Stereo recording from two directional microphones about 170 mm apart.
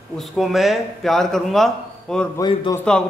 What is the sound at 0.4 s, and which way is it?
A man's voice, centre (ahead or behind).